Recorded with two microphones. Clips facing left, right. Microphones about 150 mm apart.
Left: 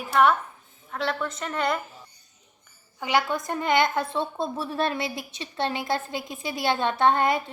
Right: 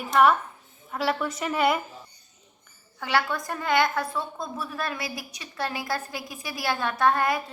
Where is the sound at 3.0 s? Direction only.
15° left (ahead or behind).